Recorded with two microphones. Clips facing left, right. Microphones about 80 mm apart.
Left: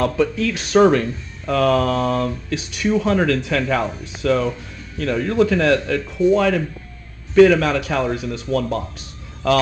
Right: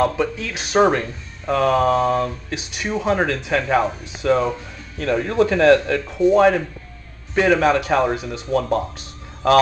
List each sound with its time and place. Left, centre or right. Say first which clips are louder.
0.0 s speech: left 1 dB; centre; by 6.1 s right
6.1 s speech: right 2 dB; right